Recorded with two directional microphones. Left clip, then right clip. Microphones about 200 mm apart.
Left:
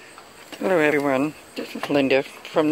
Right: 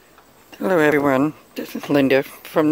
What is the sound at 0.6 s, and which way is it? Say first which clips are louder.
Speech: right 3 dB; 35° right (ahead or behind).